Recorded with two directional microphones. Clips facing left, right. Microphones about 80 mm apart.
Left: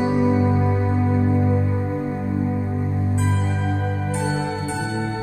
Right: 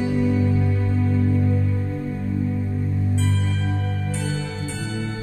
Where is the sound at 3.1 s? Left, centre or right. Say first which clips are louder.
Left 2 dB; left.